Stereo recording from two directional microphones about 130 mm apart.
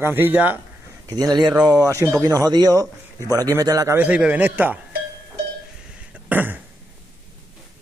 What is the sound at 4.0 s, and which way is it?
Speech, 10° right (ahead or behind).